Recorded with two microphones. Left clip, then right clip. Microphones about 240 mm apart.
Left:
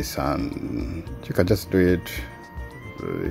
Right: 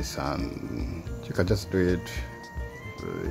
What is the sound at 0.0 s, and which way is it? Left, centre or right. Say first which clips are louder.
Speech: left 5 dB; centre.